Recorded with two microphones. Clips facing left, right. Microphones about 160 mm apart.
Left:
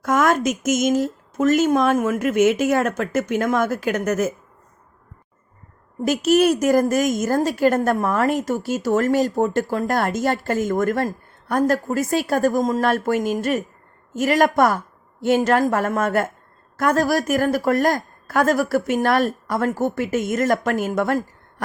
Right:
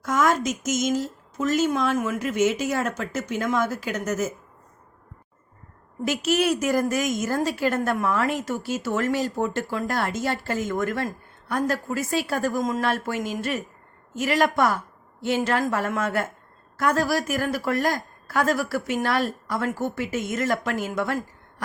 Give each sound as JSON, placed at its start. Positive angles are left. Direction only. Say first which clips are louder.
{"t": 0.0, "sound": "a woman's voice", "louder": "left 4 dB", "side_deg": 55}
{"t": 6.1, "sound": "a woman's voice", "louder": "left 6 dB", "side_deg": 45}